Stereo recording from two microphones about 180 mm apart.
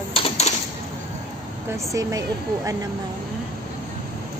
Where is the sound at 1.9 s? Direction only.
20° right (ahead or behind).